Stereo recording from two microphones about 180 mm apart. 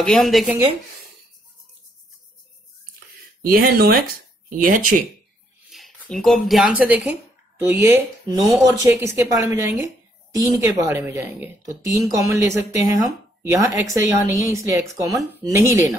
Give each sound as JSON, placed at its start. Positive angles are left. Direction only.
{"t": 0.0, "sound": "speech", "side_deg": 0}
{"t": 3.4, "sound": "speech", "side_deg": -55}
{"t": 5.7, "sound": "speech", "side_deg": 0}
{"t": 13.8, "sound": "speech", "side_deg": -15}